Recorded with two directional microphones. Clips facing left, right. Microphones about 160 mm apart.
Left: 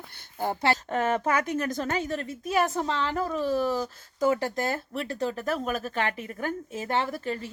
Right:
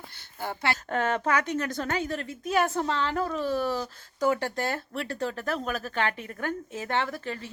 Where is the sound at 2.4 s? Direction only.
Centre (ahead or behind).